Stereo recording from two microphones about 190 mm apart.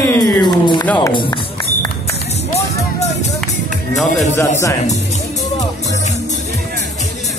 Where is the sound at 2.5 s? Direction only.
35° left (ahead or behind).